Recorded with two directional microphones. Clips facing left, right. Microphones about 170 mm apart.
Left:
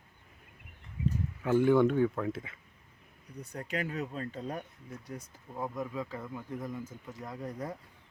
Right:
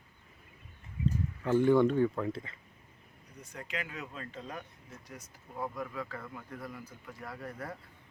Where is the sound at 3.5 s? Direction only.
35° left (ahead or behind).